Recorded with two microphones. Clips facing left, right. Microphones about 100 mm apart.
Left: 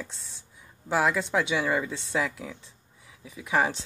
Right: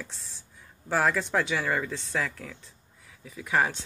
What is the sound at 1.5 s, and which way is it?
Speech, 15° left (ahead or behind).